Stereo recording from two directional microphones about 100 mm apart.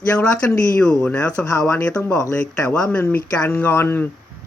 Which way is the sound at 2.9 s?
15° left (ahead or behind).